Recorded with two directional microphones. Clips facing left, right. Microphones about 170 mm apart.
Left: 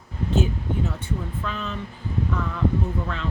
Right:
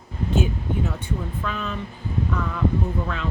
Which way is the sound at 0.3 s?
15° right (ahead or behind).